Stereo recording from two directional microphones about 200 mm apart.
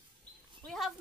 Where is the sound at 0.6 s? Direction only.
Centre (ahead or behind).